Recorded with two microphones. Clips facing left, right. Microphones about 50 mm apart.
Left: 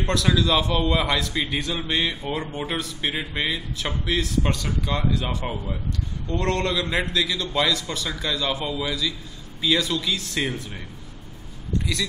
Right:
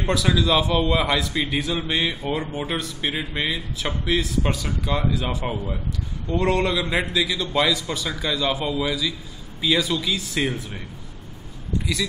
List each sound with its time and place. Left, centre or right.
0.0 s a man's voice: centre
11.8 s speech: centre